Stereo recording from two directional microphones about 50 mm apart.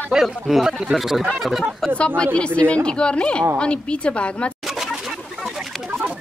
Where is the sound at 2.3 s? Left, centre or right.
Left.